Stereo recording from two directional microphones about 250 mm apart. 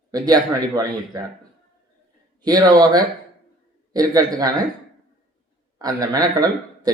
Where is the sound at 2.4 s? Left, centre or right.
Centre.